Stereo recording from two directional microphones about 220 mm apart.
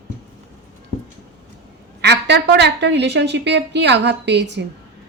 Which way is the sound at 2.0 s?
50° right (ahead or behind).